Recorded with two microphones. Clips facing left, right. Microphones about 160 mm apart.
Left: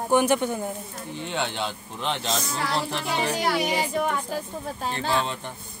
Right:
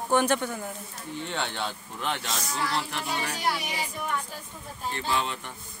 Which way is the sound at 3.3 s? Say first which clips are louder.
Left 6 dB; 70° left (ahead or behind).